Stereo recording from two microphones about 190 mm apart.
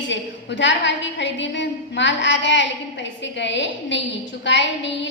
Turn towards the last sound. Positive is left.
turn(degrees=70)  # may be behind; listen again after turning